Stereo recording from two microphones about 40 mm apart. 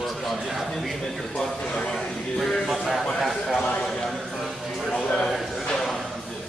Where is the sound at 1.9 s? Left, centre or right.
Centre.